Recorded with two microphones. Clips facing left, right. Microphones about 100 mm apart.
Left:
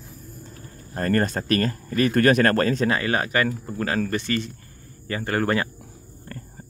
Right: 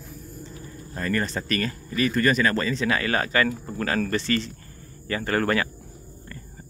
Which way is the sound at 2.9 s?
25° left (ahead or behind).